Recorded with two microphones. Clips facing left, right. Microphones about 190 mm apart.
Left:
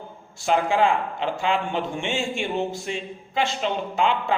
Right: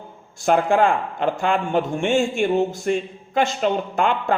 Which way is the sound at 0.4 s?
50° right (ahead or behind).